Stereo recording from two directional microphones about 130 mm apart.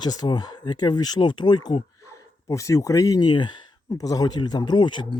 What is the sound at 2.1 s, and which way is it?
Speech, 25° left (ahead or behind).